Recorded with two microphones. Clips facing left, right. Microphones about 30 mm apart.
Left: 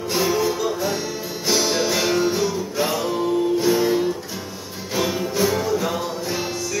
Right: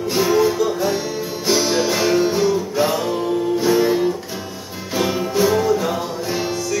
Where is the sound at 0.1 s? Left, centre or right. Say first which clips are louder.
Right 4 dB; centre.